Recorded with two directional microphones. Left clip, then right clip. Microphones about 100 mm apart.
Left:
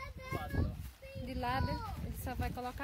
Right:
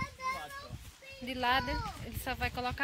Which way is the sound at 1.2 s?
15° left (ahead or behind).